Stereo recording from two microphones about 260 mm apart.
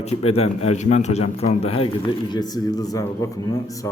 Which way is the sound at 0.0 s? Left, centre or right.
Left.